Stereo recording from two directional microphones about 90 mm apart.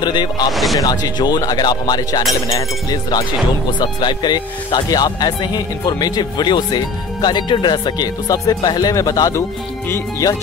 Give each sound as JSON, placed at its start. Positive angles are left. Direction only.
{"t": 0.0, "sound": "speech", "side_deg": 55}
{"t": 0.5, "sound": "speech", "side_deg": 0}
{"t": 0.7, "sound": "speech", "side_deg": 45}